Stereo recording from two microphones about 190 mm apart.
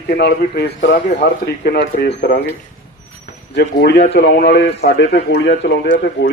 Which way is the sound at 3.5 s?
60° left (ahead or behind).